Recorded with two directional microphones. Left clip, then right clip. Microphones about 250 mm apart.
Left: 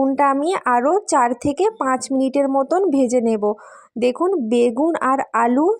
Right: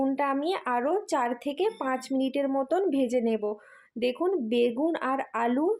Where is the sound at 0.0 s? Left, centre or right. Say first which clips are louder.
Left 10 dB; left.